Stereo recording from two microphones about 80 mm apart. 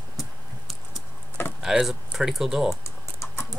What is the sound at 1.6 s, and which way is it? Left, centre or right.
Speech, centre.